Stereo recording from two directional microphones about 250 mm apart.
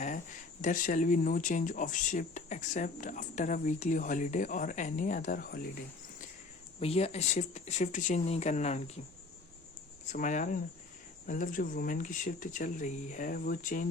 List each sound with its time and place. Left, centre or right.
0.6 s speech: left
6.7 s speech: left
10.1 s speech: left